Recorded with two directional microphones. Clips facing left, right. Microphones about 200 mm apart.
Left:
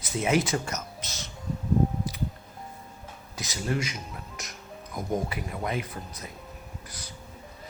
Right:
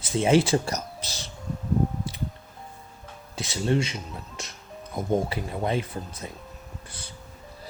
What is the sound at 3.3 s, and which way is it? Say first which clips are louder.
Speech: right 5 dB; 30° right (ahead or behind).